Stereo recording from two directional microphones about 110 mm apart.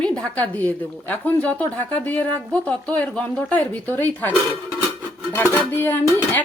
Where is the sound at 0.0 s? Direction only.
10° left (ahead or behind).